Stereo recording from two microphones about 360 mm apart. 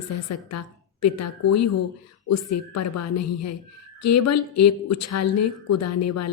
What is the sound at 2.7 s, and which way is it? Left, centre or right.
Speech, left.